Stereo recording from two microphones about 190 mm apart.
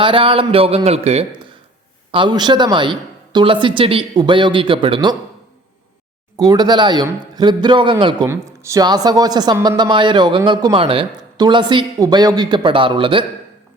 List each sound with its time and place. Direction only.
0.0 s speech: 25° right (ahead or behind)
6.3 s speech: 20° right (ahead or behind)
8.3 s speech: 15° right (ahead or behind)